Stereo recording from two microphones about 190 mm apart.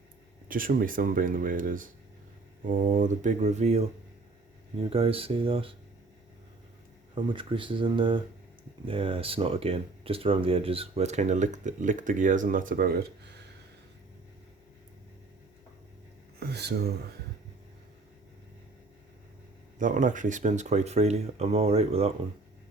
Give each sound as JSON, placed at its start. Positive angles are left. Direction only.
{"t": 0.4, "sound": "speech", "side_deg": -45}
{"t": 4.9, "sound": "speech", "side_deg": -30}
{"t": 7.3, "sound": "speech", "side_deg": -25}
{"t": 16.4, "sound": "speech", "side_deg": -60}
{"t": 19.8, "sound": "speech", "side_deg": -45}